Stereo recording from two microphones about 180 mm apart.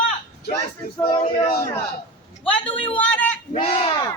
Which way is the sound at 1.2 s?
55° left (ahead or behind).